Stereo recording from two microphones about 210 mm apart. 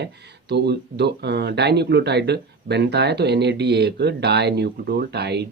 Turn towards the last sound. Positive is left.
turn(degrees=-50)  # may be behind; listen again after turning